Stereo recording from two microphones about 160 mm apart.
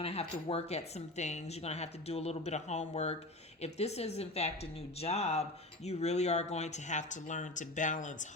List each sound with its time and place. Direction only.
0.0 s speech: 40° left (ahead or behind)